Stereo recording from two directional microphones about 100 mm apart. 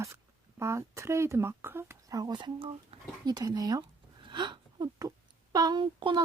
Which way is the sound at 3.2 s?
40° right (ahead or behind).